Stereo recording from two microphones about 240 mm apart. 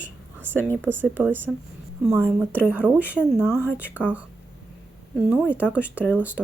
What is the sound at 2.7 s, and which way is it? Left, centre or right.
Speech, centre.